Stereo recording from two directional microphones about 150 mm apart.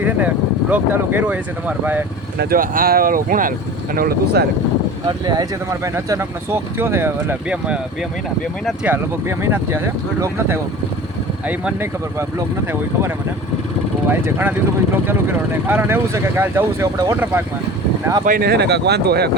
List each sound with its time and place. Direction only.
0.0 s speech: 10° right (ahead or behind)
2.4 s speech: 75° right (ahead or behind)
3.9 s speech: 85° right
5.2 s speech: 25° right (ahead or behind); by 11.9 s 10° right (ahead or behind)
14.1 s speech: 15° right (ahead or behind)
18.3 s speech: 90° right